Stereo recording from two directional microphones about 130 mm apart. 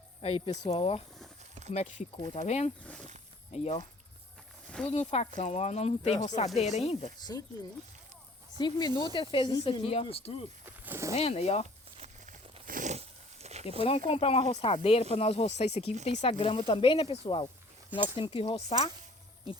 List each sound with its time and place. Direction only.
0.2 s speech: 45° left (ahead or behind)
1.7 s speech: 65° left (ahead or behind)
2.8 s speech: 10° left (ahead or behind)
3.5 s speech: 55° left (ahead or behind)
4.9 s speech: 55° left (ahead or behind)
7.2 s speech: 30° left (ahead or behind)
8.5 s speech: 35° left (ahead or behind)
9.8 s speech: 45° left (ahead or behind)
10.7 s speech: 15° right (ahead or behind)
11.1 s speech: 55° left (ahead or behind)
11.9 s a sound: 65° right (ahead or behind)
12.6 s a sound: 80° right; by 13.7 s 55° right (ahead or behind)
13.8 s speech: 50° left (ahead or behind)